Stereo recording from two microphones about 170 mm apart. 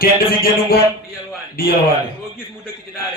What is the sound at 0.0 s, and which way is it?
A man's voice, 60° left (ahead or behind).